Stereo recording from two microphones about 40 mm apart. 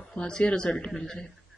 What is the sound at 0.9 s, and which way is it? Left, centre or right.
Speech, centre.